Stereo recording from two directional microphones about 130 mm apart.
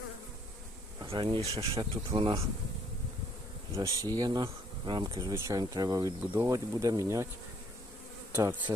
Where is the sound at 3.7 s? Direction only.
25° right (ahead or behind).